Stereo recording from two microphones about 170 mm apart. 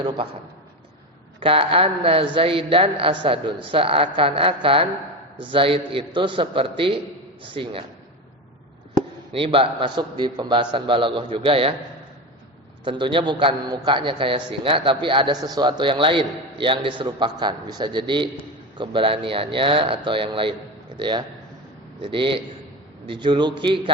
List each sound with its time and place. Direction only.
1.4 s a woman's voice: 30° right (ahead or behind)
9.3 s a man's voice: 30° right (ahead or behind)
12.8 s a man's voice: 30° right (ahead or behind)